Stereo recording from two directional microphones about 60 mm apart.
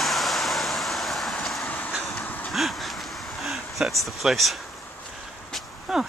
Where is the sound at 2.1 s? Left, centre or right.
Left.